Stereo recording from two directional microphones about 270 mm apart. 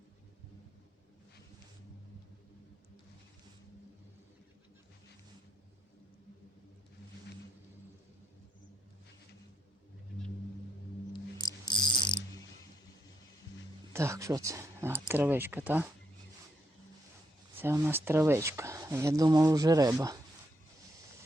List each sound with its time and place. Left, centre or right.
11.7 s cricket: centre
13.9 s speech: centre
17.6 s speech: centre